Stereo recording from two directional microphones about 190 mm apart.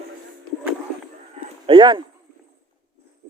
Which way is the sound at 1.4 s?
25° right (ahead or behind).